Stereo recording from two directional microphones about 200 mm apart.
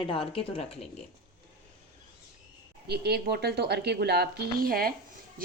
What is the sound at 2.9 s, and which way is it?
Speech, 55° right (ahead or behind).